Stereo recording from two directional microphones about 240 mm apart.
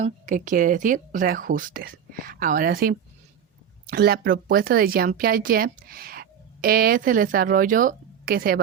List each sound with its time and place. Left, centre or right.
0.0 s speech: right